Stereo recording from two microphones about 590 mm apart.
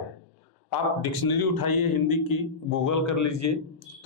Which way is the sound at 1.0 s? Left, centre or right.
Left.